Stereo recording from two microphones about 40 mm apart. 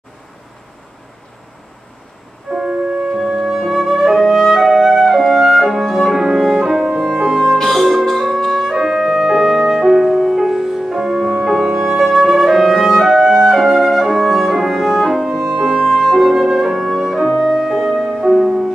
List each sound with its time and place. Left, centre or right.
2.5 s music: centre
3.3 s flute: centre
3.6 s music: centre
7.5 s music: centre
8.5 s music: centre